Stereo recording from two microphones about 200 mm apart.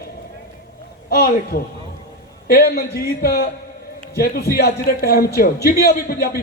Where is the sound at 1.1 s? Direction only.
50° left (ahead or behind).